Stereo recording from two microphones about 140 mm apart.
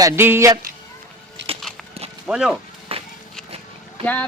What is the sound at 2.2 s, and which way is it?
Speech, 5° right (ahead or behind).